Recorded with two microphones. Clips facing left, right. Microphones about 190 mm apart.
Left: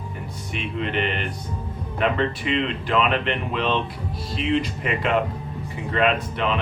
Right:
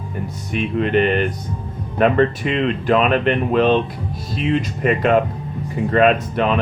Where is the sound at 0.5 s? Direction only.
45° right (ahead or behind).